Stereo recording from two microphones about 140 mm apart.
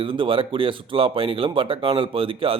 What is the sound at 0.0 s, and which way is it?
Speech, 40° right (ahead or behind).